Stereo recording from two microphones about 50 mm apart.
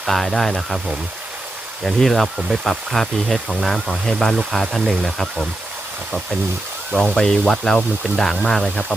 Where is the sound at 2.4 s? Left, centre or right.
Centre.